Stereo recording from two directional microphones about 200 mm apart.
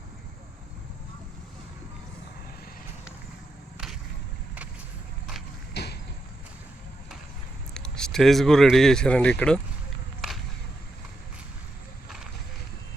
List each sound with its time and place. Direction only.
5.7 s vehicle: 55° left (ahead or behind)
7.7 s speech: 5° left (ahead or behind)
10.2 s a sound: centre (ahead or behind)